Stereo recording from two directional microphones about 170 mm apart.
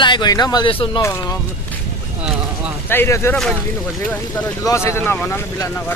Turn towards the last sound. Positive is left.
turn(degrees=15)  # may be behind; listen again after turning